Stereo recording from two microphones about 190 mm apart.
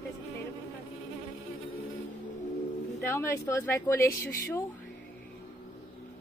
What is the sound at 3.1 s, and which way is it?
A woman's voice, 10° left (ahead or behind).